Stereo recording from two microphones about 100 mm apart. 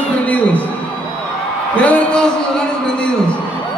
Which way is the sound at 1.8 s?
15° left (ahead or behind).